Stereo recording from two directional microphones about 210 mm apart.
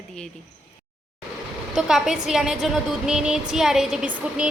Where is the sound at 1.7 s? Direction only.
Centre (ahead or behind).